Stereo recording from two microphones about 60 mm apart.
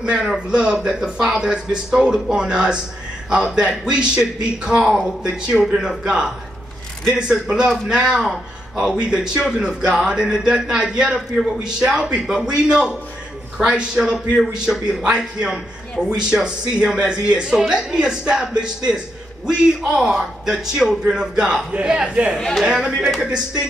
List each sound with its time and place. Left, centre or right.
0.5 s a man's voice: centre